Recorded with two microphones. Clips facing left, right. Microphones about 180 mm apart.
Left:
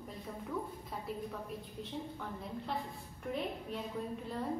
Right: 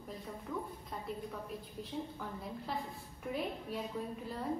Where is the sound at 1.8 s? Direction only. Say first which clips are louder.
Right 1 dB; centre (ahead or behind).